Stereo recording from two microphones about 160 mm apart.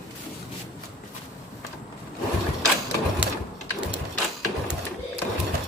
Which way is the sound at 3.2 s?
10° right (ahead or behind).